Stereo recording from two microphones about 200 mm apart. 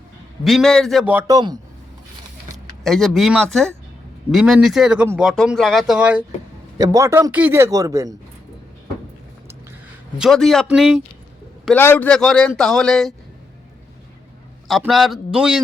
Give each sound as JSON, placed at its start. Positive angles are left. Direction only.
{"t": 0.4, "sound": "speech", "side_deg": 0}
{"t": 1.3, "sound": "a man's voice", "side_deg": -20}
{"t": 2.8, "sound": "speech", "side_deg": 0}
{"t": 6.7, "sound": "speech", "side_deg": -15}
{"t": 10.2, "sound": "speech", "side_deg": 0}
{"t": 11.6, "sound": "speech", "side_deg": 10}
{"t": 14.7, "sound": "speech", "side_deg": 0}